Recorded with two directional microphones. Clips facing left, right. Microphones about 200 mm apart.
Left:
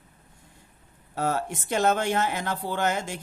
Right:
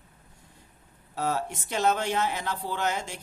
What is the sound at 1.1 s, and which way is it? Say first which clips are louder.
Speech: left 2 dB; 50° left (ahead or behind).